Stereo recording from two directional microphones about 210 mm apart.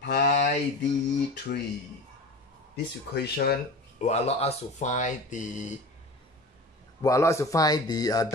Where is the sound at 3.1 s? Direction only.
50° left (ahead or behind).